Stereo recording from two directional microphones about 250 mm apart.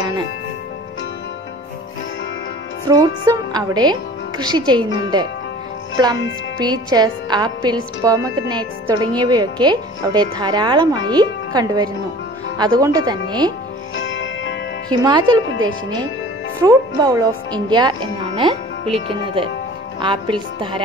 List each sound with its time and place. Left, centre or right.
2.9 s a woman's voice: centre
6.6 s a woman's voice: centre
13.9 s music: left
14.9 s a woman's voice: centre
16.6 s speech: centre